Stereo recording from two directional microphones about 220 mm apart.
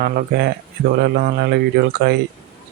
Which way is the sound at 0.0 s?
50° right (ahead or behind).